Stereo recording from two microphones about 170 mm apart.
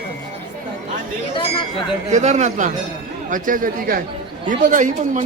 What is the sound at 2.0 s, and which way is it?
Speech, 40° right (ahead or behind).